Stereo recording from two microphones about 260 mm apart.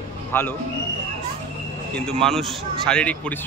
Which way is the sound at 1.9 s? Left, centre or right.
Centre.